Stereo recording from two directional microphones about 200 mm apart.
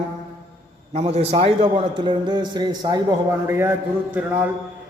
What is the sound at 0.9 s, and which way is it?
A man's voice, 30° right (ahead or behind).